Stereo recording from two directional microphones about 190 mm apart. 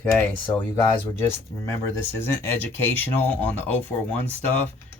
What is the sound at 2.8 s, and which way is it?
Speech, 10° left (ahead or behind).